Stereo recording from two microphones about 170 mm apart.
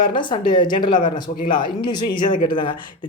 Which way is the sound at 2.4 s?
30° left (ahead or behind).